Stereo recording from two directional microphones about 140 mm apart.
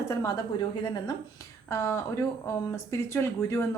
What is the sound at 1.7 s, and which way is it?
Speech, 20° left (ahead or behind).